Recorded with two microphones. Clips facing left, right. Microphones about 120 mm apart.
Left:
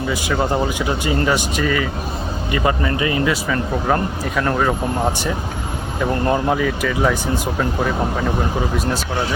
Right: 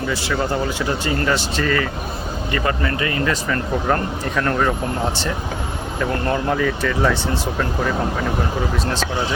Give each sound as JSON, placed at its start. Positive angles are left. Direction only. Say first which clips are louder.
{"t": 0.1, "sound": "speech", "louder": "left 3 dB", "side_deg": 15}
{"t": 4.4, "sound": "speech", "louder": "left 1 dB", "side_deg": 5}
{"t": 6.2, "sound": "speech", "louder": "left 4 dB", "side_deg": 20}
{"t": 6.6, "sound": "speech", "louder": "even", "side_deg": 5}